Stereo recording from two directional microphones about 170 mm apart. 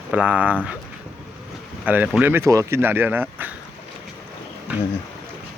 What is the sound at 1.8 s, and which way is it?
Speech, 10° right (ahead or behind).